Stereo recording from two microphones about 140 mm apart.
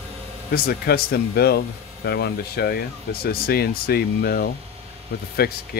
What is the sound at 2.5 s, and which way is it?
Speech, 90° left.